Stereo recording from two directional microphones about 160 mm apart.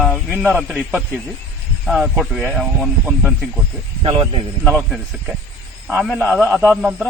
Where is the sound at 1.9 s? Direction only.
Centre (ahead or behind).